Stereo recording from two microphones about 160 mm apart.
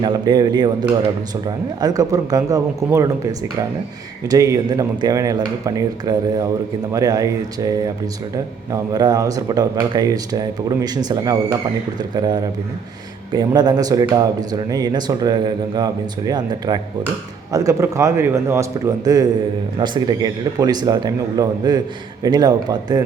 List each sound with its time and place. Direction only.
0.0 s speech: 25° right (ahead or behind)